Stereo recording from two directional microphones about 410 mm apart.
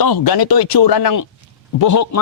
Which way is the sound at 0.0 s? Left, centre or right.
Left.